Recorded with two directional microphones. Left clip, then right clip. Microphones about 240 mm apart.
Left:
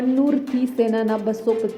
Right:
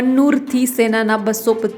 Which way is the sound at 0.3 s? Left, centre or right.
Centre.